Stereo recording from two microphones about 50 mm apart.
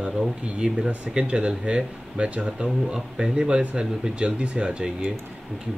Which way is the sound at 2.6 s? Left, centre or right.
Centre.